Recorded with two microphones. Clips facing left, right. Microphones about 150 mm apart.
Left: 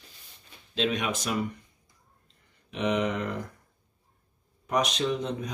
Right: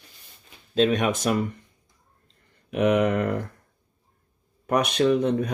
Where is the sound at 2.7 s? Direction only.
55° right (ahead or behind).